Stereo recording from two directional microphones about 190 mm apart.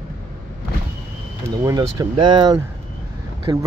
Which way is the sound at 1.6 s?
15° right (ahead or behind).